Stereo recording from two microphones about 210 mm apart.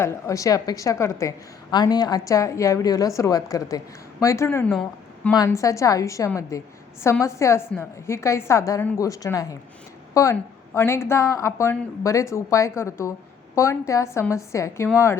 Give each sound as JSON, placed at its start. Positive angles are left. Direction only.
{"t": 0.0, "sound": "a woman's voice", "side_deg": 15}
{"t": 5.3, "sound": "a woman's voice", "side_deg": 15}